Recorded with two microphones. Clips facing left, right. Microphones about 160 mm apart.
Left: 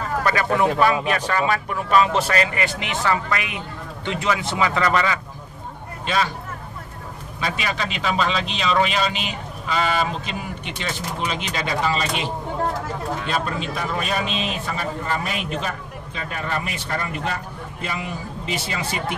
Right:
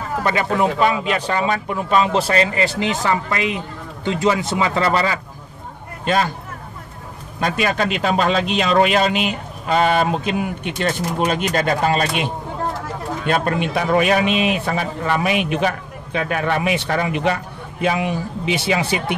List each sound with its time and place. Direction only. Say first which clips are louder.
0.2 s speech: right 2 dB; 20° right (ahead or behind)
7.3 s speech: right 7 dB; 50° right (ahead or behind)
13.3 s a man's voice: right 10 dB; 60° right (ahead or behind)